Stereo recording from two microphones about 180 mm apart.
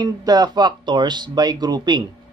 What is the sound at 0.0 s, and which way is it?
A man's voice, 20° right (ahead or behind).